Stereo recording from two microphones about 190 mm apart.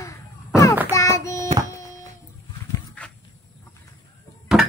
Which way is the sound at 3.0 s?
5° left (ahead or behind).